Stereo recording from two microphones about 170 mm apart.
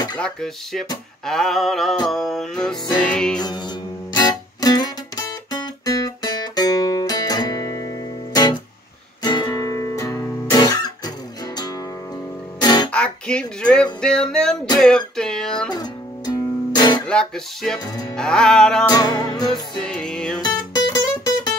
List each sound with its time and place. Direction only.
0.2 s music: 5° left (ahead or behind)
3.4 s music: 25° left (ahead or behind)
12.5 s music: 25° left (ahead or behind)
12.9 s a sound: 5° left (ahead or behind)
14.0 s music: 5° left (ahead or behind)
15.7 s music: 25° left (ahead or behind)
17.1 s music: 5° left (ahead or behind)
18.9 s music: 25° left (ahead or behind)
19.8 s music: 5° left (ahead or behind)
20.3 s music: 25° left (ahead or behind)